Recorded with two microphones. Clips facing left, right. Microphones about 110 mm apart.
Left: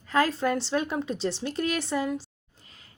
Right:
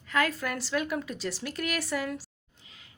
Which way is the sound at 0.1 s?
30° left (ahead or behind).